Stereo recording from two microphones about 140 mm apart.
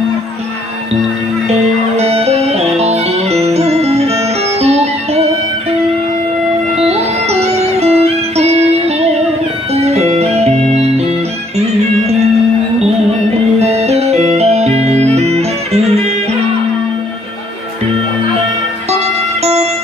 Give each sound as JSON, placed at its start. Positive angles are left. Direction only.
{"t": 2.0, "sound": "music", "side_deg": -50}
{"t": 6.8, "sound": "music", "side_deg": -50}
{"t": 13.6, "sound": "music", "side_deg": -50}
{"t": 19.4, "sound": "music", "side_deg": -50}